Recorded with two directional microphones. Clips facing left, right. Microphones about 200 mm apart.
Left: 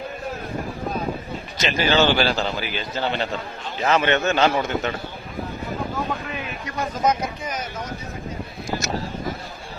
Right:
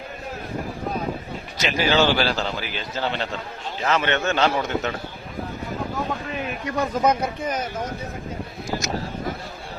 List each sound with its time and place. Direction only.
1.5 s a man's voice: 10° right (ahead or behind)
3.8 s a man's voice: 15° left (ahead or behind)
4.3 s a man's voice: 5° left (ahead or behind)
7.0 s speech: 60° right (ahead or behind)